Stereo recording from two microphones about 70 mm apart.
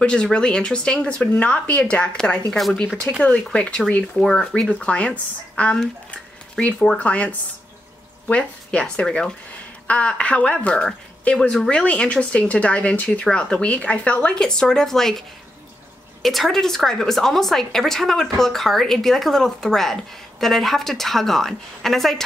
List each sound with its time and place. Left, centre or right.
0.0 s a woman's voice: centre